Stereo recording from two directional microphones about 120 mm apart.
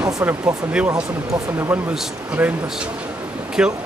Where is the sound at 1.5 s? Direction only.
20° right (ahead or behind).